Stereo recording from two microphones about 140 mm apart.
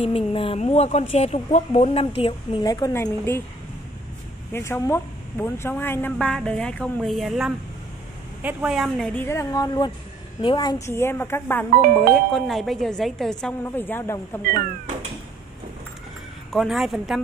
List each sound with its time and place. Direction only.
0.0 s speech: 40° left (ahead or behind)
0.6 s speech: 50° left (ahead or behind)
2.6 s a woman's voice: 25° left (ahead or behind)
4.5 s a woman's voice: 20° left (ahead or behind)
9.2 s a woman's voice: 20° left (ahead or behind)
10.9 s speech: 15° left (ahead or behind)
11.8 s speech: 90° right
12.4 s a woman's voice: centre (ahead or behind)
13.7 s speech: 15° left (ahead or behind)
16.5 s a woman's voice: centre (ahead or behind)